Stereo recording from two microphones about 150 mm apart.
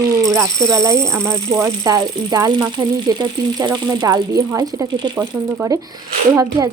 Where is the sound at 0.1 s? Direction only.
20° right (ahead or behind).